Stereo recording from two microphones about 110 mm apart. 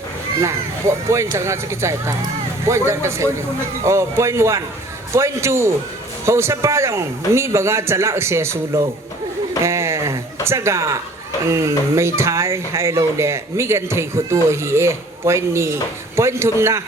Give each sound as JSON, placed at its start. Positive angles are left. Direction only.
{"t": 0.4, "sound": "speech", "side_deg": -25}
{"t": 9.6, "sound": "a sound", "side_deg": -25}
{"t": 10.4, "sound": "speech", "side_deg": -25}